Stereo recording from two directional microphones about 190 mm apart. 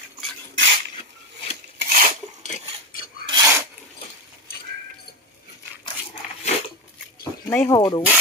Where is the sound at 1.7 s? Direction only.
45° right (ahead or behind).